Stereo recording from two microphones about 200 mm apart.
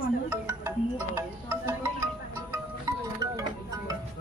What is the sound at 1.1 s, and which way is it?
Music, 15° right (ahead or behind).